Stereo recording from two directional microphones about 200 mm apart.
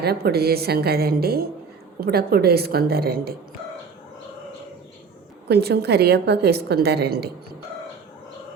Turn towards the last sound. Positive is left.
turn(degrees=-55)  # may be behind; listen again after turning